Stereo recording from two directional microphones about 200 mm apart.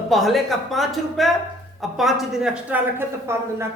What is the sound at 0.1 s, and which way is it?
A woman's voice, centre (ahead or behind).